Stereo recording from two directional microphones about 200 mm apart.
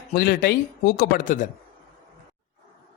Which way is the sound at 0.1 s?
50° left (ahead or behind).